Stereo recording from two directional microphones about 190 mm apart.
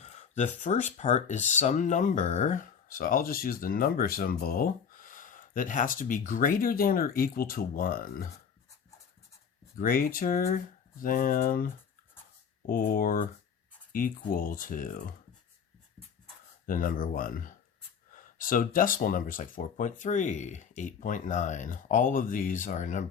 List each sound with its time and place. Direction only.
0.0 s a sound: 40° left (ahead or behind)
0.9 s speech: 35° left (ahead or behind)
9.7 s speech: 45° left (ahead or behind)
16.6 s speech: 45° left (ahead or behind)